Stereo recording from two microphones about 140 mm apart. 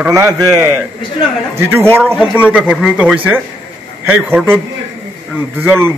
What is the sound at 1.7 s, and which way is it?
A man's voice, 20° right (ahead or behind).